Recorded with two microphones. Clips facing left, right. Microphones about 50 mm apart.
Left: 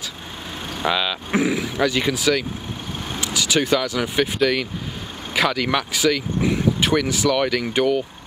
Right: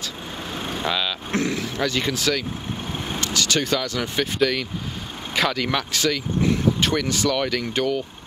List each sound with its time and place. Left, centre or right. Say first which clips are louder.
0.8 s speech: left 5 dB; centre